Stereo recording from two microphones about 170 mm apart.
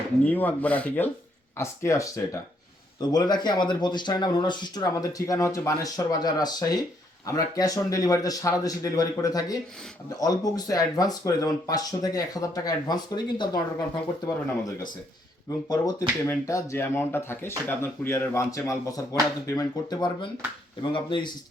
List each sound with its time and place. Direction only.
0.3 s speech: 10° left (ahead or behind)
15.4 s speech: 20° left (ahead or behind)